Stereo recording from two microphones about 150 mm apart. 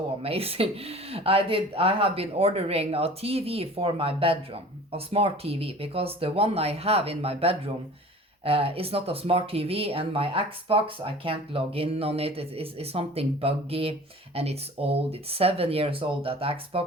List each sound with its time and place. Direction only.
0.2 s speech: 40° right (ahead or behind)